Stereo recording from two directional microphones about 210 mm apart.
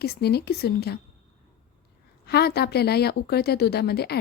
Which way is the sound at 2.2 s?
50° left (ahead or behind).